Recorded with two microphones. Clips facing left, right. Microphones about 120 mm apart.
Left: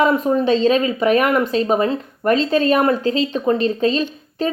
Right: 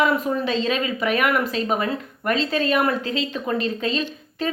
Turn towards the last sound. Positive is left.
turn(degrees=35)  # may be behind; listen again after turning